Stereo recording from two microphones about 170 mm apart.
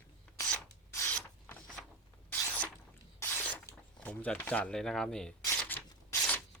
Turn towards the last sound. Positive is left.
turn(degrees=10)  # may be behind; listen again after turning